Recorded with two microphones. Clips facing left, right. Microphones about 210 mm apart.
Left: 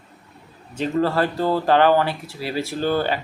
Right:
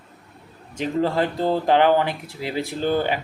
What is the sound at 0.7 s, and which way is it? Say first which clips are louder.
Speech: left 1 dB; 15° right (ahead or behind).